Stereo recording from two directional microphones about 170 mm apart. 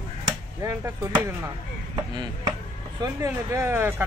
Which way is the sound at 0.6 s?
20° right (ahead or behind).